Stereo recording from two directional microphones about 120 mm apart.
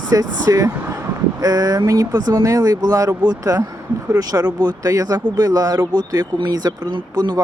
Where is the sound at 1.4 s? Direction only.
30° right (ahead or behind).